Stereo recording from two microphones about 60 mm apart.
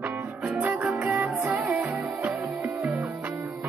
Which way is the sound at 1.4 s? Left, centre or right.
Centre.